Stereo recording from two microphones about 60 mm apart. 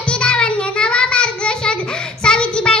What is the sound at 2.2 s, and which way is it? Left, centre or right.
Child singing, centre.